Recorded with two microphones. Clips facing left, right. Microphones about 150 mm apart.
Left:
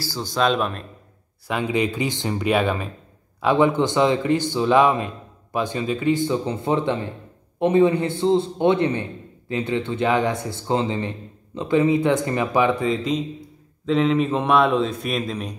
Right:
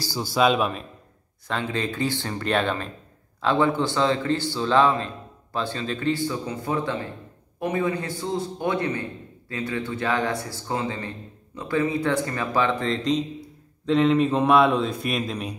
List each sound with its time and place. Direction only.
0.0 s speech: 10° right (ahead or behind)
1.5 s speech: 10° left (ahead or behind)
12.9 s a man's voice: centre (ahead or behind)